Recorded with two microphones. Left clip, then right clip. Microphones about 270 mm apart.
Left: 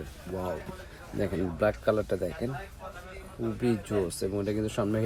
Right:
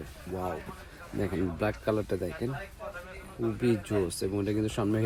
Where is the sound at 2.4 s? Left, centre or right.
Right.